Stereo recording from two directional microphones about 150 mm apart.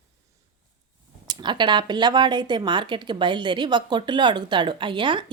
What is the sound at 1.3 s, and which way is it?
Speech, 30° right (ahead or behind).